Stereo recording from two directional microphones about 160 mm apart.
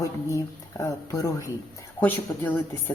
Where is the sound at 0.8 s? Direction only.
20° left (ahead or behind).